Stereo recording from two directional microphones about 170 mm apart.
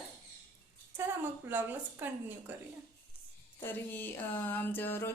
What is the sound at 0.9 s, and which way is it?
A woman's voice, 15° right (ahead or behind).